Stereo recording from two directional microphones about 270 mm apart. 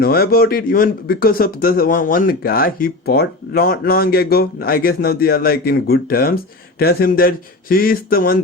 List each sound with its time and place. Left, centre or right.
0.0 s speech: left